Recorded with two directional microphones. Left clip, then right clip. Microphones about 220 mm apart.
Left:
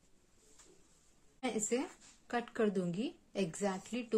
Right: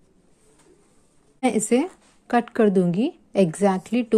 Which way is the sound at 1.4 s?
35° right (ahead or behind).